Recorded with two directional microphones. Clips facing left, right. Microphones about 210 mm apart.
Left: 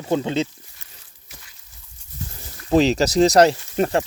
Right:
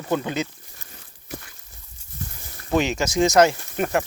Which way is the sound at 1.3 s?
55° right (ahead or behind).